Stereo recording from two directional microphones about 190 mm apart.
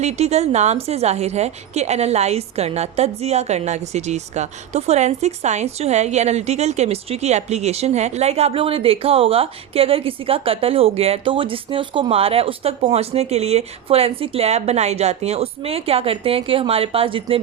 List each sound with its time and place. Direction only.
0.0 s a woman's voice: 35° right (ahead or behind)